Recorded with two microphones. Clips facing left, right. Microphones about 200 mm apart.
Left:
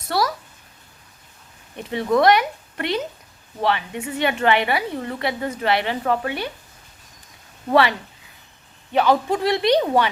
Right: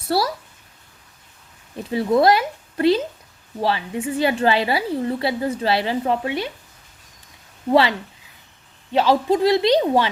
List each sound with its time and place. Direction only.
0.1 s a sound: 30° right (ahead or behind)
1.9 s a woman's voice: 30° right (ahead or behind)
7.7 s a woman's voice: 25° right (ahead or behind)